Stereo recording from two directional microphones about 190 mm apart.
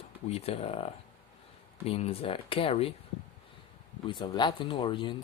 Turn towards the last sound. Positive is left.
turn(degrees=25)  # may be behind; listen again after turning